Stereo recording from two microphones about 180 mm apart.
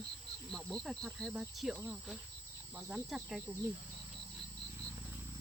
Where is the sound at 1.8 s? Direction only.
10° right (ahead or behind).